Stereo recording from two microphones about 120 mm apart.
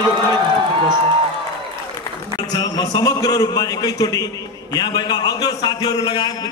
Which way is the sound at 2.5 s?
35° left (ahead or behind).